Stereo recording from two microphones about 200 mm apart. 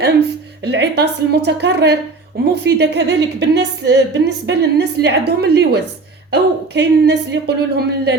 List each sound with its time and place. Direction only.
0.0 s a woman's voice: 55° right (ahead or behind)